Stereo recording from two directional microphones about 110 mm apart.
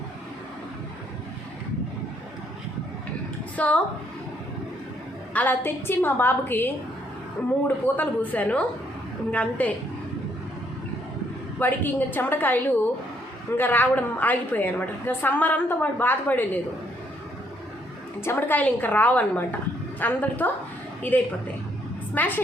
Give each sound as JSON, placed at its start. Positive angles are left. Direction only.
{"t": 3.6, "sound": "a woman's voice", "side_deg": 10}
{"t": 5.3, "sound": "a woman's voice", "side_deg": 15}
{"t": 7.9, "sound": "a woman's voice", "side_deg": 15}
{"t": 11.6, "sound": "a woman's voice", "side_deg": 15}
{"t": 18.2, "sound": "a woman's voice", "side_deg": 20}
{"t": 22.1, "sound": "a woman's voice", "side_deg": 15}